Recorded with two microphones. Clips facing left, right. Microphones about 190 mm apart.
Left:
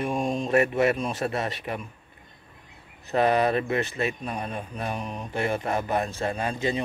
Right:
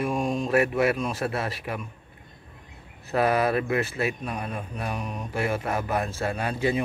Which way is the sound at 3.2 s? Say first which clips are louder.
Left 1 dB; 5° right (ahead or behind).